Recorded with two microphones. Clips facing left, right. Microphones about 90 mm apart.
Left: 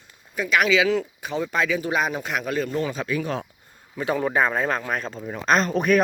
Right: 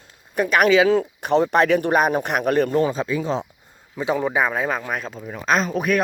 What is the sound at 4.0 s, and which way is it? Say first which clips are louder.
Speech: right 1 dB; 10° right (ahead or behind).